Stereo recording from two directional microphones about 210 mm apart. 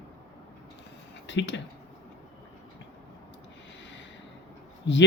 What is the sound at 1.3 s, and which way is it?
Speech, 60° left (ahead or behind).